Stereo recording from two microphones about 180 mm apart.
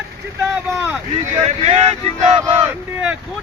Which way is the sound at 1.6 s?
35° right (ahead or behind).